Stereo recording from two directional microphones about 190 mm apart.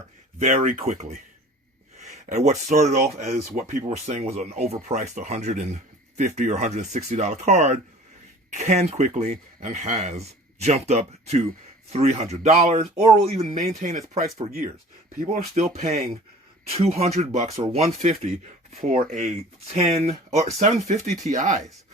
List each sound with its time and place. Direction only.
0.3 s speech: 40° right (ahead or behind)